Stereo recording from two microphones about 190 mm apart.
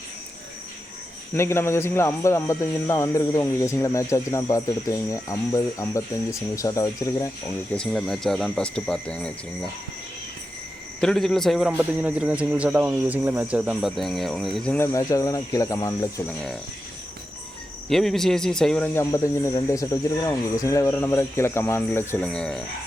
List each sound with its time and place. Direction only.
1.3 s speech: 15° left (ahead or behind)
7.8 s a man's voice: centre (ahead or behind)
11.0 s a man's voice: centre (ahead or behind)
14.9 s speech: 15° left (ahead or behind)
17.8 s a man's voice: centre (ahead or behind)
18.9 s speech: 15° left (ahead or behind)